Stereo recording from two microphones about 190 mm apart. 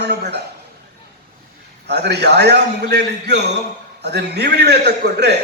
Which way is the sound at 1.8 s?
60° right (ahead or behind).